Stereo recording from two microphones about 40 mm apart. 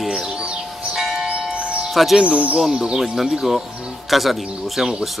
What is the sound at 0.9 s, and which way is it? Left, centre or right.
Bell, centre.